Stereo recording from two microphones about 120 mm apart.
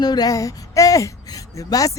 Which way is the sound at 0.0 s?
35° left (ahead or behind).